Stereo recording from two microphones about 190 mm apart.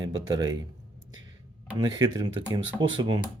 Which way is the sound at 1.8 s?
20° right (ahead or behind).